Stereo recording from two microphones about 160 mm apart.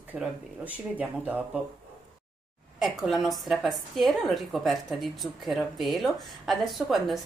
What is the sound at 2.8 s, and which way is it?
A woman's voice, centre (ahead or behind).